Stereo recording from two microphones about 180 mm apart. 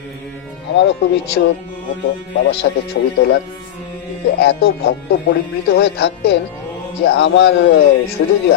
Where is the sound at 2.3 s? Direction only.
80° left.